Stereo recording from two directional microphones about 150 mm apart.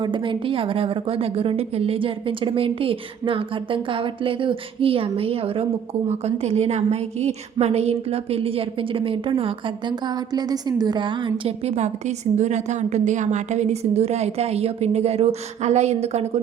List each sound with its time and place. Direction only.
0.0 s a woman's voice: 35° right (ahead or behind)